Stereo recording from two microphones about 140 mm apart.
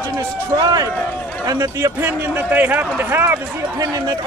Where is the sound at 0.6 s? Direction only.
25° right (ahead or behind).